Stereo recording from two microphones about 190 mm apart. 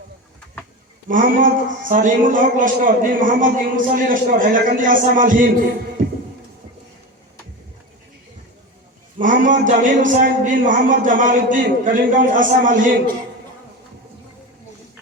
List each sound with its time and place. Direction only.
1.0 s a man's voice: 45° right (ahead or behind)
9.1 s a man's voice: 45° right (ahead or behind)